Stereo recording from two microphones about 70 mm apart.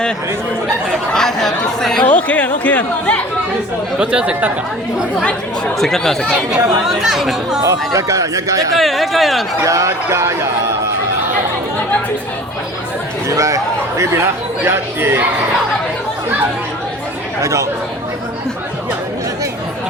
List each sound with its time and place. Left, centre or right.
1.1 s speech: centre
2.0 s speech: left
3.9 s speech: centre
5.8 s speech: centre
6.8 s speech: centre
7.6 s speech: right
8.7 s speech: centre
9.6 s speech: right
13.2 s speech: right
17.4 s speech: right